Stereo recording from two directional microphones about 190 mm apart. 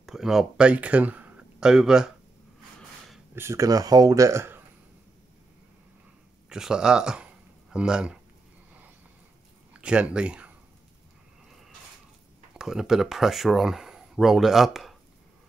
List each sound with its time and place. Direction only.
0.0 s speech: centre (ahead or behind)
3.3 s speech: 15° right (ahead or behind)
6.5 s speech: 5° right (ahead or behind)
9.8 s speech: 5° right (ahead or behind)
12.5 s speech: 5° right (ahead or behind)